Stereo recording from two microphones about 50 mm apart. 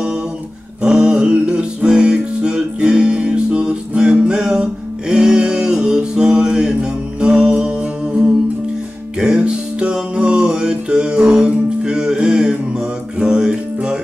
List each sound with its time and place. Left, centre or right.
0.8 s music: centre
9.2 s music: centre